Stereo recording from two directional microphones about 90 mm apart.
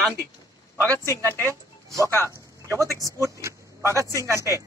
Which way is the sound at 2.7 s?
40° right (ahead or behind).